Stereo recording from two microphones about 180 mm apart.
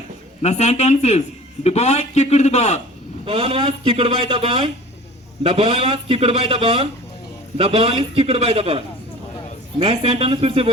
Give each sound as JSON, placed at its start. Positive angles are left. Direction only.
{"t": 0.4, "sound": "a man's voice", "side_deg": 35}
{"t": 3.2, "sound": "a man's voice", "side_deg": -35}